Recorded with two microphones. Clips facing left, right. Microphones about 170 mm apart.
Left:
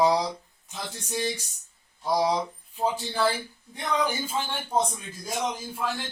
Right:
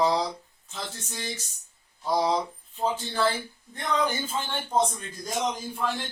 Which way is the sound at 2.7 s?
10° left (ahead or behind).